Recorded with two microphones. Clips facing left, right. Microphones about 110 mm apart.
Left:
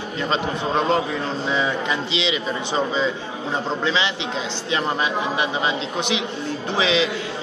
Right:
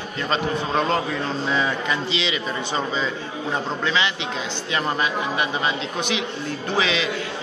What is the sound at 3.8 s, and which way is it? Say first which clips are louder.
Speech: even; 25° left (ahead or behind).